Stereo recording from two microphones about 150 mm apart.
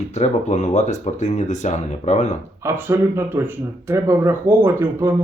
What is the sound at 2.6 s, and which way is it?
Speech, 15° right (ahead or behind).